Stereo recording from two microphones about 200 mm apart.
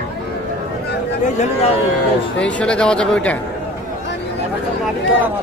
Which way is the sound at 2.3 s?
5° left (ahead or behind).